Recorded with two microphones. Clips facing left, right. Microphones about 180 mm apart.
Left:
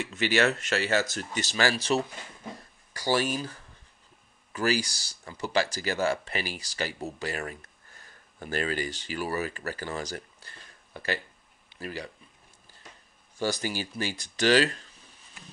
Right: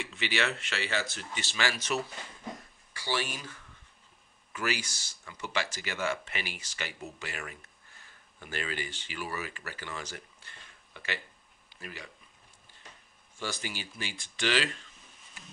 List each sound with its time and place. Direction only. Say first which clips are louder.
0.0 s speech: left 7 dB; 45° left (ahead or behind)
2.5 s a sound: left 2 dB; 40° left (ahead or behind)
4.5 s speech: left 7 dB; 35° left (ahead or behind)
13.4 s speech: left 8 dB; 40° left (ahead or behind)